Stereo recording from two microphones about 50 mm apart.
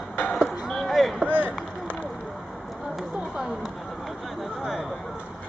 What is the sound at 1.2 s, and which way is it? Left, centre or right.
Run, right.